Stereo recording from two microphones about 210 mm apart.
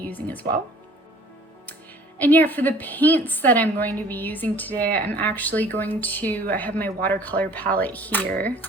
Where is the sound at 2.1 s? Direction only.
10° left (ahead or behind).